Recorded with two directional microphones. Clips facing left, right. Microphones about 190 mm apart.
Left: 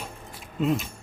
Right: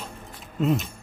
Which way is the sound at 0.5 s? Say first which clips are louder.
Right 1 dB; centre (ahead or behind).